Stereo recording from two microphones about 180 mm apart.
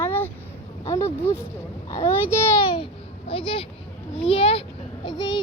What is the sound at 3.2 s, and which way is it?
A child's voice, 30° left (ahead or behind).